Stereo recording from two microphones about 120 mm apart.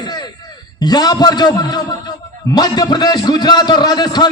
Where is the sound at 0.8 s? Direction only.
35° left (ahead or behind).